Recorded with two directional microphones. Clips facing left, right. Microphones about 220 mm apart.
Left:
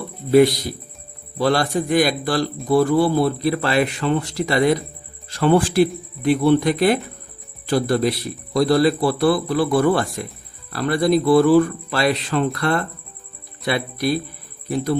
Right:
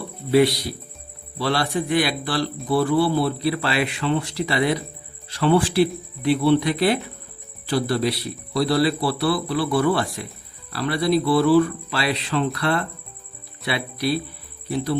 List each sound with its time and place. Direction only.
0.3 s speech: 45° left (ahead or behind)